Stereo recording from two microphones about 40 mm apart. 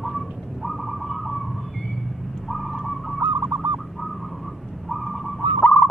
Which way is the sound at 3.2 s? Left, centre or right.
Right.